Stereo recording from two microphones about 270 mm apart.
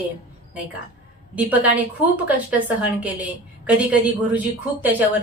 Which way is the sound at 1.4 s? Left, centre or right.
Centre.